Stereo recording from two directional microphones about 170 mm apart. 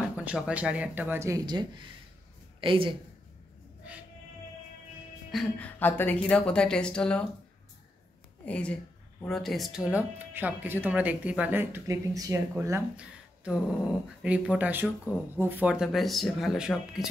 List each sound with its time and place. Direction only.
0.2 s speech: 5° right (ahead or behind); by 3.0 s 30° right (ahead or behind)
5.3 s a woman's voice: 5° left (ahead or behind)
8.5 s speech: 5° left (ahead or behind)